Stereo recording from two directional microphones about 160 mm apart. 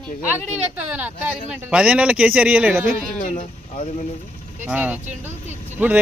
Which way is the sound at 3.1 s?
50° left (ahead or behind).